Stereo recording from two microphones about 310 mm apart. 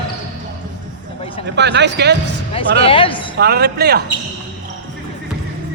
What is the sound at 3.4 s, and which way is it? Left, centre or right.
Speech, right.